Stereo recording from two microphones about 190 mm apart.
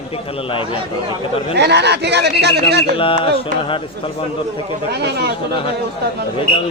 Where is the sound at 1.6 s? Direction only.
60° right (ahead or behind).